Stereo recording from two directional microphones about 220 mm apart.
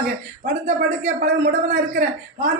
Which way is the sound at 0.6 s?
35° right (ahead or behind).